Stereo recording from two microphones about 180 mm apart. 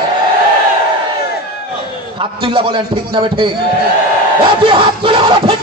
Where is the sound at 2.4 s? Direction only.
30° right (ahead or behind).